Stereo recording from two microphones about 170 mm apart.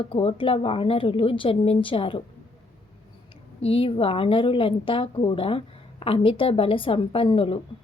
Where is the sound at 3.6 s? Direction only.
35° left (ahead or behind).